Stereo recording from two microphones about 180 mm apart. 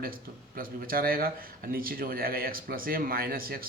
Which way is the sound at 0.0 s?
55° right (ahead or behind).